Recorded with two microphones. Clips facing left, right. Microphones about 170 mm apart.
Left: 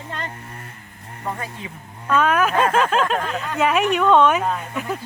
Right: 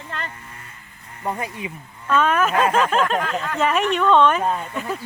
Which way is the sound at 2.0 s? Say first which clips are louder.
Left 1 dB; 5° left (ahead or behind).